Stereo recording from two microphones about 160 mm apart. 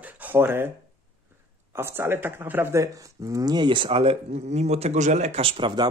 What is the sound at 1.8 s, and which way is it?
Speech, 15° right (ahead or behind).